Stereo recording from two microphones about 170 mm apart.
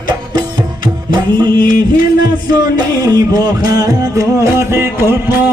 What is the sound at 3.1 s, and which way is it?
Music, 20° right (ahead or behind).